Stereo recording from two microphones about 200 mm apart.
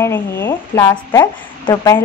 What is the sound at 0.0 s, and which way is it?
Speech, 10° left (ahead or behind).